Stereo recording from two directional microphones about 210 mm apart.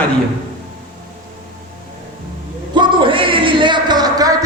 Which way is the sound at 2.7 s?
25° right (ahead or behind).